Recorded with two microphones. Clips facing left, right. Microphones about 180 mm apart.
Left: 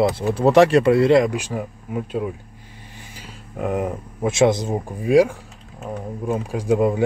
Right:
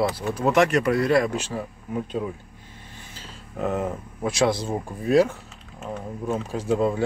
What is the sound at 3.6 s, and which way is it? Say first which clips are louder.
Speech: left 2 dB; 15° left (ahead or behind).